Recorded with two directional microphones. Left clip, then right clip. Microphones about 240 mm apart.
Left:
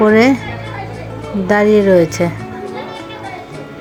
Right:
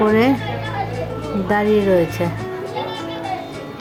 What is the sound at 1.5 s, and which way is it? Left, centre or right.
Speech, centre.